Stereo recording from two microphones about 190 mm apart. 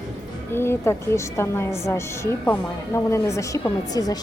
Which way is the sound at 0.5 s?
15° left (ahead or behind).